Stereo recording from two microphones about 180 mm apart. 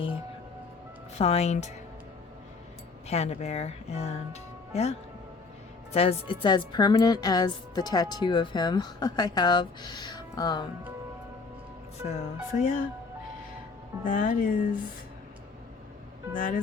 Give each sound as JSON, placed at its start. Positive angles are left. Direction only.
{"t": 1.2, "sound": "speech", "side_deg": 35}
{"t": 3.1, "sound": "a woman's voice", "side_deg": 35}
{"t": 12.1, "sound": "music", "side_deg": 45}
{"t": 14.0, "sound": "music", "side_deg": 45}
{"t": 16.3, "sound": "music", "side_deg": 45}